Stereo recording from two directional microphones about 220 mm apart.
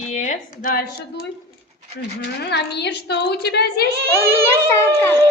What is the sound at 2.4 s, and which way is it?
A woman's voice, 50° left (ahead or behind).